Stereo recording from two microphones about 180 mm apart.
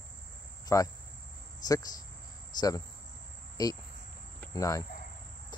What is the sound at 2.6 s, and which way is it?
Speech, 20° left (ahead or behind).